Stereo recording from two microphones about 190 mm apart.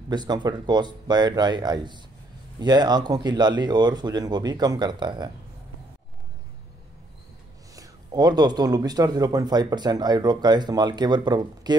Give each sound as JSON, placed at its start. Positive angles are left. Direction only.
{"t": 0.1, "sound": "speech", "side_deg": -20}
{"t": 7.7, "sound": "speech", "side_deg": -20}